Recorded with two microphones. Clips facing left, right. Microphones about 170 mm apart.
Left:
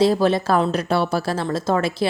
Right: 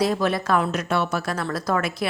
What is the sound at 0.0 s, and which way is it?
A woman's voice, 30° left (ahead or behind).